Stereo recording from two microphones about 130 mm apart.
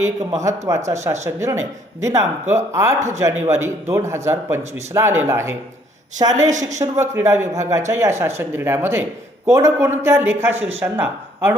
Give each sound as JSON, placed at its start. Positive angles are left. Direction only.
{"t": 0.4, "sound": "speech", "side_deg": -25}
{"t": 6.3, "sound": "a woman's voice", "side_deg": -70}
{"t": 6.7, "sound": "speech", "side_deg": -20}